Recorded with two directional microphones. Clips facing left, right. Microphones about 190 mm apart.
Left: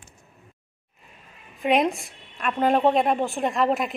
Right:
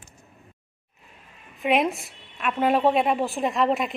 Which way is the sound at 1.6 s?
Centre (ahead or behind).